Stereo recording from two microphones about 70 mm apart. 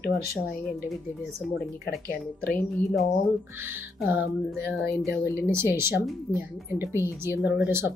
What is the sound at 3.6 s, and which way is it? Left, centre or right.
A woman's voice, right.